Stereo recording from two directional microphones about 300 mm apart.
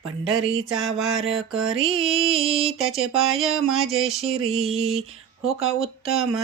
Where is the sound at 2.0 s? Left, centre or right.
Centre.